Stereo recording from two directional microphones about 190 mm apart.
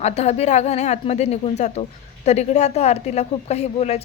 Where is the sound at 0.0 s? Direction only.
35° left (ahead or behind).